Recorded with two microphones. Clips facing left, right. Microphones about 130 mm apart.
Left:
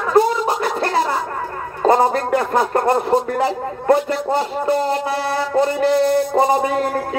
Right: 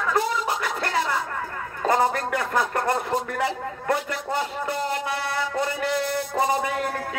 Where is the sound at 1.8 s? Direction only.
35° left (ahead or behind).